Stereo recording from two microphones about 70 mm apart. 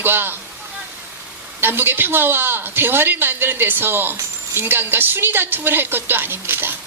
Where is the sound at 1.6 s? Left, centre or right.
Right.